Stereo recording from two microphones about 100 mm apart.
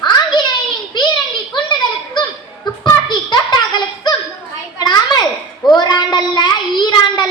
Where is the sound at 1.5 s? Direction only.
50° left (ahead or behind).